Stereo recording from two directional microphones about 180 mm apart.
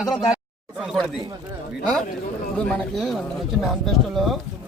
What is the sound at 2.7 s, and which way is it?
Speech, centre (ahead or behind).